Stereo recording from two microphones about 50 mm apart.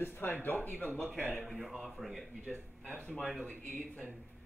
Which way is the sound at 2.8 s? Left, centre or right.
Right.